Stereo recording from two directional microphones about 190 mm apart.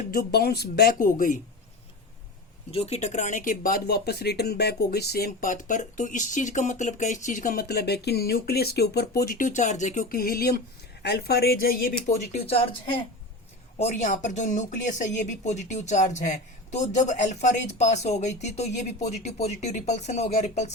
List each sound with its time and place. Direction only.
0.0 s speech: 50° left (ahead or behind)
2.7 s speech: 35° left (ahead or behind)
13.7 s speech: 35° left (ahead or behind)